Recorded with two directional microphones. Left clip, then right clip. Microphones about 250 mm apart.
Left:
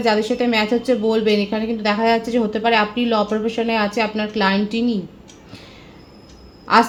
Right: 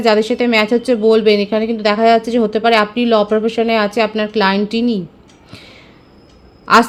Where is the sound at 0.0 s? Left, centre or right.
Right.